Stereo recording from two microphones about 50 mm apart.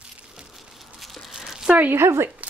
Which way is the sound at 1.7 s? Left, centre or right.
Right.